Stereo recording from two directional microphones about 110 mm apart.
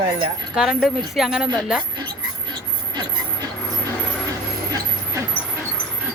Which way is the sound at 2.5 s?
45° right (ahead or behind).